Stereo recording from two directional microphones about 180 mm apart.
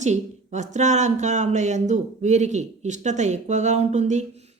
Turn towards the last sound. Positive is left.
turn(degrees=-40)  # may be behind; listen again after turning